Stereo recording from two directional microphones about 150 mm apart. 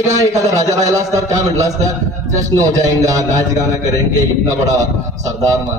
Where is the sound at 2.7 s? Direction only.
25° right (ahead or behind).